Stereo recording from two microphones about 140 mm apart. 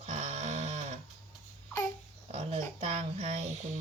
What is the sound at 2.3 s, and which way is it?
Speech, 45° right (ahead or behind).